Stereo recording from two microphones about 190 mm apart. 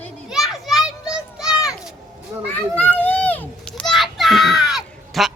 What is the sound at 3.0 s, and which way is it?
Children playing, 10° left (ahead or behind).